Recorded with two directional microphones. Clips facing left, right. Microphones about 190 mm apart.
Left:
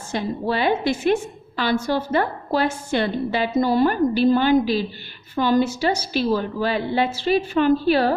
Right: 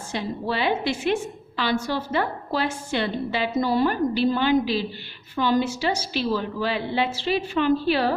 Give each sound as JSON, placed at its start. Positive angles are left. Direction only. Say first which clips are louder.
{"t": 0.1, "sound": "a woman's voice", "louder": "left 4 dB", "side_deg": 45}